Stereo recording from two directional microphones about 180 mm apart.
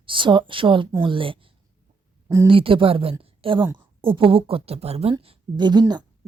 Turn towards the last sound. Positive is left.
turn(degrees=-25)  # may be behind; listen again after turning